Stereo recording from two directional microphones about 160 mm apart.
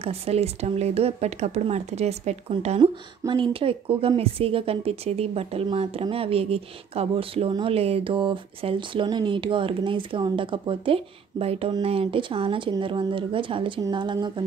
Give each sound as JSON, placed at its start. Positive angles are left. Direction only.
{"t": 0.0, "sound": "speech", "side_deg": -40}
{"t": 2.8, "sound": "speech", "side_deg": -30}